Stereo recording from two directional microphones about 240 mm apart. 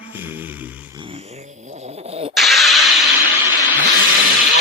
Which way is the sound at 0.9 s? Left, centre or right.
Right.